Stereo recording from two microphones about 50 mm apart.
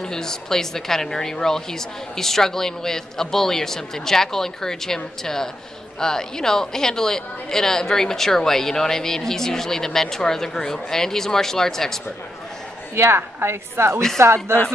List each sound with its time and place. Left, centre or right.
0.0 s a woman's voice: centre
12.9 s a woman's voice: right